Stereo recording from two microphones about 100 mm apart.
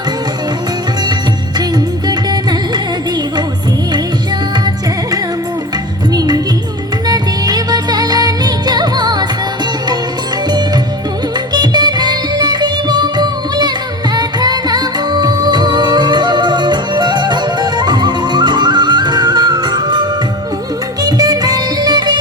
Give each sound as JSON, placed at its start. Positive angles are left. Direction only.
{"t": 1.5, "sound": "music", "side_deg": -45}
{"t": 6.1, "sound": "music", "side_deg": -40}
{"t": 11.3, "sound": "music", "side_deg": -45}